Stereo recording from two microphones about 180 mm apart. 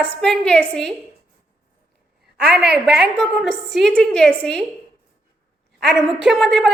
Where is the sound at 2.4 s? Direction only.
65° right (ahead or behind).